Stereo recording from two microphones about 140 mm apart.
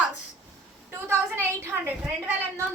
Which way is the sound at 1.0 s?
15° right (ahead or behind).